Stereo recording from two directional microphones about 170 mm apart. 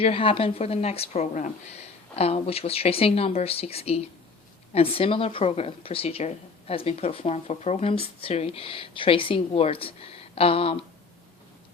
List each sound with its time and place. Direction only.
0.0 s a woman's voice: 35° left (ahead or behind)